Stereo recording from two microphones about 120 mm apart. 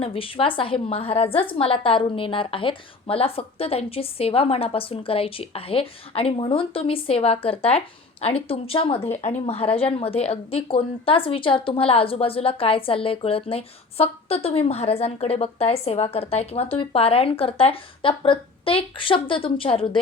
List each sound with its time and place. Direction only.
0.0 s a woman's voice: 50° left (ahead or behind)
9.2 s a woman's voice: 60° left (ahead or behind)